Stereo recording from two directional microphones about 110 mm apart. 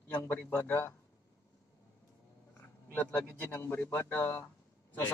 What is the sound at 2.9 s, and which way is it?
A man's voice, 15° left (ahead or behind).